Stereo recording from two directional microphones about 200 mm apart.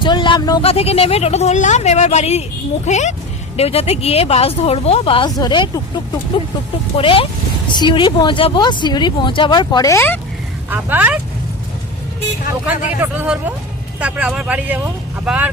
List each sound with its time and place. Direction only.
0.0 s speech: 25° left (ahead or behind)
6.9 s speech: 25° left (ahead or behind)
10.7 s speech: 10° right (ahead or behind)
13.0 s speech: 5° right (ahead or behind)